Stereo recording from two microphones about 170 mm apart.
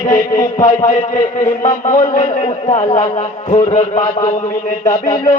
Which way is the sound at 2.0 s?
45° left (ahead or behind).